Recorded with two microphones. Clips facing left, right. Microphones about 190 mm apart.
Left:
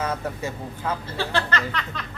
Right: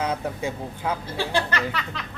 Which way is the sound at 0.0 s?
15° right (ahead or behind).